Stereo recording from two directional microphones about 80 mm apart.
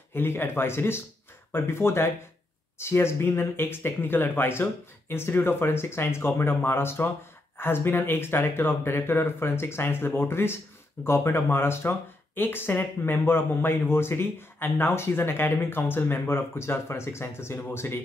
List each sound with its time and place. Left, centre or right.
0.1 s speech: left